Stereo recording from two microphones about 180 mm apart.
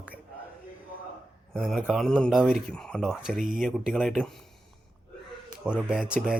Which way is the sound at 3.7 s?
Centre (ahead or behind).